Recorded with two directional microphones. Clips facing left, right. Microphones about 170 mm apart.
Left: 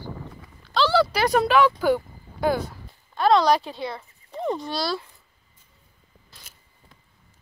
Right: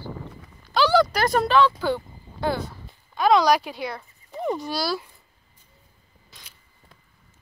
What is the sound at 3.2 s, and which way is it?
Speech, 5° right (ahead or behind).